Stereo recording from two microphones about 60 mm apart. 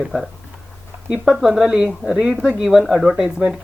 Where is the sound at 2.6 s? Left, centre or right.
Centre.